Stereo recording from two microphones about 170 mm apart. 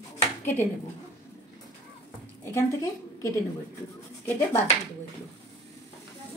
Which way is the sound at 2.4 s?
15° left (ahead or behind).